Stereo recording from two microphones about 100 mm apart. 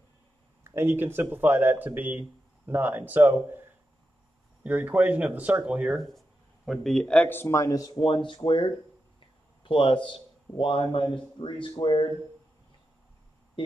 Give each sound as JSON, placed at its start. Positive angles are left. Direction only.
{"t": 0.7, "sound": "speech", "side_deg": -25}
{"t": 4.6, "sound": "speech", "side_deg": -15}
{"t": 5.9, "sound": "speech", "side_deg": 0}
{"t": 7.2, "sound": "speech", "side_deg": 20}
{"t": 8.0, "sound": "a man's voice", "side_deg": 55}